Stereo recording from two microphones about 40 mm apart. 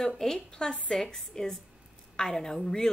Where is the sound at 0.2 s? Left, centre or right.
Centre.